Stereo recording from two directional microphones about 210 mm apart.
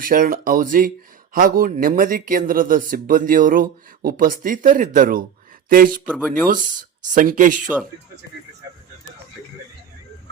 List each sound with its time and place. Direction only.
0.0 s speech: 40° right (ahead or behind)
6.1 s speech: 5° right (ahead or behind)
7.1 s speech: 40° right (ahead or behind)